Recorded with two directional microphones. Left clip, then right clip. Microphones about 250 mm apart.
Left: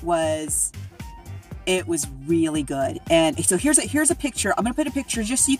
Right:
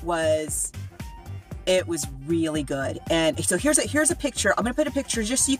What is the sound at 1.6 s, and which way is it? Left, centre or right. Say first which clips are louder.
Speech: right 1 dB; centre.